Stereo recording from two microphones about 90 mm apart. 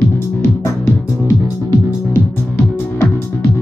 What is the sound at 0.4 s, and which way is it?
Music, 25° left (ahead or behind).